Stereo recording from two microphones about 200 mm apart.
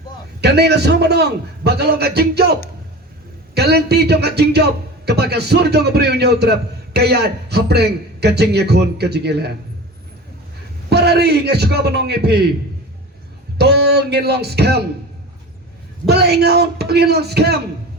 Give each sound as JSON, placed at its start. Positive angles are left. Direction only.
{"t": 0.4, "sound": "a man's voice", "side_deg": -55}
{"t": 10.8, "sound": "a man's voice", "side_deg": -55}
{"t": 13.6, "sound": "a man's voice", "side_deg": -55}
{"t": 16.0, "sound": "speech", "side_deg": -55}